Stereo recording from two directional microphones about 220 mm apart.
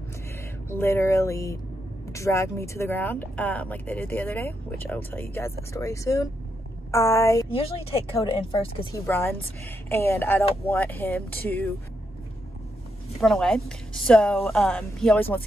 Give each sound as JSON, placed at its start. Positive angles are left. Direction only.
{"t": 0.7, "sound": "speech", "side_deg": 10}
{"t": 7.4, "sound": "speech", "side_deg": 25}
{"t": 8.9, "sound": "speech", "side_deg": 10}
{"t": 13.2, "sound": "a woman's voice", "side_deg": 0}